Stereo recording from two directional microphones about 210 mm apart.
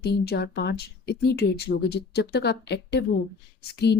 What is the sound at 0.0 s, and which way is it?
Speech, 50° left (ahead or behind).